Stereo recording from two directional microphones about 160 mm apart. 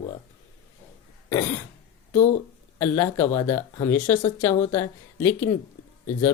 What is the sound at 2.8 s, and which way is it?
Speech, 20° left (ahead or behind).